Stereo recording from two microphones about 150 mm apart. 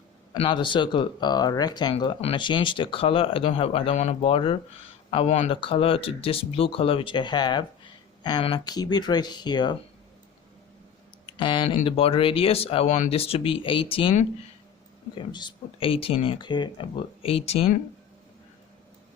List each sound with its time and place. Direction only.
0.3 s speech: 30° left (ahead or behind)
11.3 s speech: 30° left (ahead or behind)
15.1 s speech: 30° left (ahead or behind)